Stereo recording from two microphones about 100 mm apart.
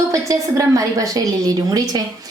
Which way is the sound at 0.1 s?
35° right (ahead or behind).